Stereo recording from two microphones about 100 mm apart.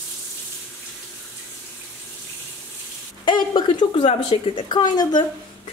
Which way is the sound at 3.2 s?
50° left (ahead or behind).